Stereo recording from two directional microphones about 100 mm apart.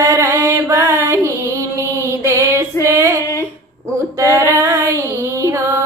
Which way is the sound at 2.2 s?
30° right (ahead or behind).